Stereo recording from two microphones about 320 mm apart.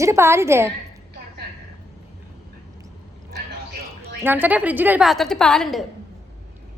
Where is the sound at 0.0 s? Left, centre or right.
Centre.